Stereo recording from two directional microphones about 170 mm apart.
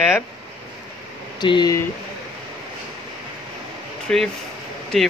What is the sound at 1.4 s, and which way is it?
Speech, 25° left (ahead or behind).